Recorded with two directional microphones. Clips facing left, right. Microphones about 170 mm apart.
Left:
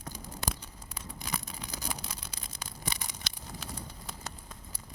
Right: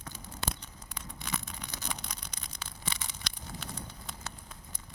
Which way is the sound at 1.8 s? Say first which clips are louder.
Left 2 dB; 5° left (ahead or behind).